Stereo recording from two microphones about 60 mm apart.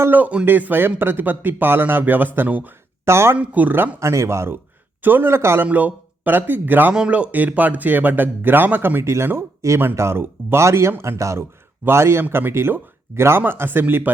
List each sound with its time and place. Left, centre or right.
0.1 s a man's voice: right
3.1 s speech: right
3.3 s a man's voice: right
4.0 s speech: right
5.0 s speech: right
5.6 s speech: right
6.9 s a man's voice: centre; by 9.0 s right
9.0 s speech: right
9.6 s speech: right
11.9 s speech: right